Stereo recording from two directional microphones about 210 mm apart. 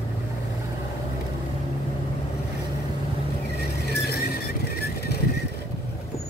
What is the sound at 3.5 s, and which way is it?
Vehicle, 50° left (ahead or behind).